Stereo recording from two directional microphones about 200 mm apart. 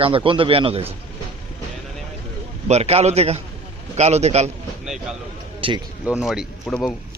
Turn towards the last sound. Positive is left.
turn(degrees=5)  # may be behind; listen again after turning